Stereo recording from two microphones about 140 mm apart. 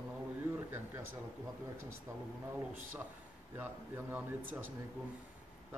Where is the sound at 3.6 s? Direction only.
15° right (ahead or behind).